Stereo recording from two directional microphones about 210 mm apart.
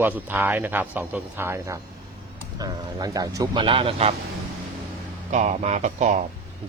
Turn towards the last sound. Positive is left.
turn(degrees=-35)  # may be behind; listen again after turning